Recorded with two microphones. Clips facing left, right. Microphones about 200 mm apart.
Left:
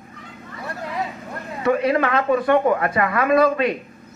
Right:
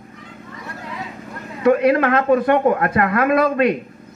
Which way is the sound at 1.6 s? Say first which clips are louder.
Right 4 dB; 55° right (ahead or behind).